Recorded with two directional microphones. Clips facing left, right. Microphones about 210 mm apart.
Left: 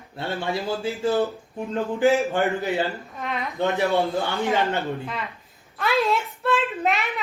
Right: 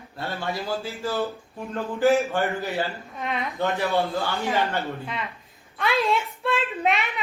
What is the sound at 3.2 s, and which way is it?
Speech, centre (ahead or behind).